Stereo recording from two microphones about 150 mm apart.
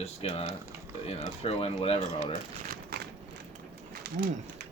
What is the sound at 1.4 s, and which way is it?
Speech, 40° left (ahead or behind).